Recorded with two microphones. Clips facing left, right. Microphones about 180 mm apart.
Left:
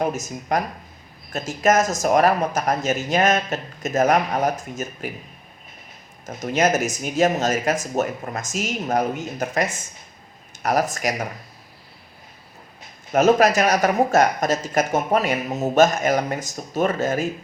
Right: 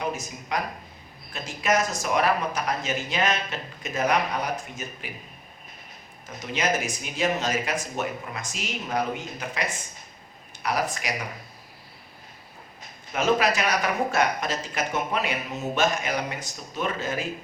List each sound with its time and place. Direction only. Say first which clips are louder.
0.0 s speech: left 6 dB; 45° left (ahead or behind)
6.2 s speech: left 7 dB; 45° left (ahead or behind)
13.1 s speech: left 7 dB; 45° left (ahead or behind)